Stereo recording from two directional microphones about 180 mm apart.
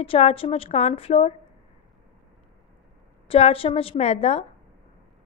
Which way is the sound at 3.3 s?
30° left (ahead or behind).